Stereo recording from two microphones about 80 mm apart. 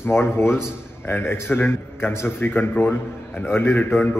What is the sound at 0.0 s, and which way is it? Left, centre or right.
A man's voice, left.